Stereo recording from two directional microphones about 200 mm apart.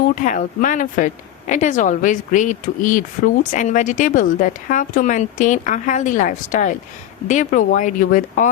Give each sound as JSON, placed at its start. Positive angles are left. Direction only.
{"t": 0.2, "sound": "speech", "side_deg": 40}